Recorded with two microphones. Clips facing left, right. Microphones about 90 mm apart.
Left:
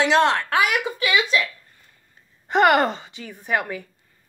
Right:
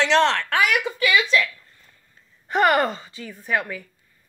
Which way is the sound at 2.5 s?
20° left (ahead or behind).